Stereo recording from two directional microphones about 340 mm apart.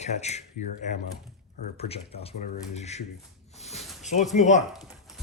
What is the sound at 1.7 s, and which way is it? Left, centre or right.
Speech, centre.